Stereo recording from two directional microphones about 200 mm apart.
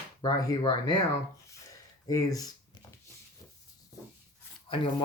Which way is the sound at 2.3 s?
20° left (ahead or behind).